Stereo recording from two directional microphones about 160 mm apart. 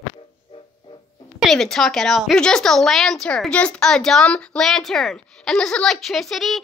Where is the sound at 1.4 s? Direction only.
Centre (ahead or behind).